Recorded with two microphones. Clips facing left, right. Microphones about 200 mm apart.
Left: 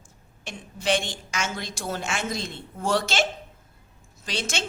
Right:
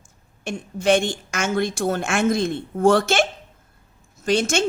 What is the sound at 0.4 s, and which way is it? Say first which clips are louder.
Speech: right 7 dB; 50° right (ahead or behind).